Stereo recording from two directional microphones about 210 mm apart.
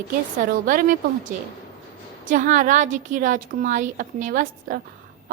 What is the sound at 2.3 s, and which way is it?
A woman's voice, 35° right (ahead or behind).